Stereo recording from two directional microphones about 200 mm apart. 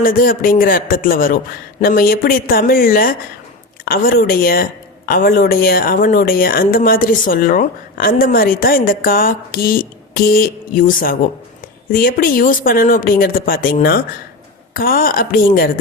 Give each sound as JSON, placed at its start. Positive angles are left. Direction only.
{"t": 0.0, "sound": "speech", "side_deg": 45}